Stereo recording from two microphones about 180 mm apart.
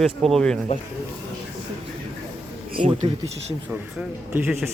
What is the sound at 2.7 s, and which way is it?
Speech, 45° right (ahead or behind).